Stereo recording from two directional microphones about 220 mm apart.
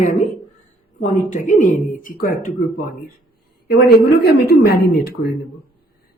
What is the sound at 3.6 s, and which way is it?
A woman's voice, 45° left (ahead or behind).